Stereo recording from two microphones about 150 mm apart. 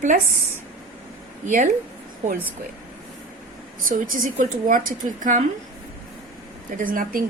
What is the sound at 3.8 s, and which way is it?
A woman's voice, 60° right (ahead or behind).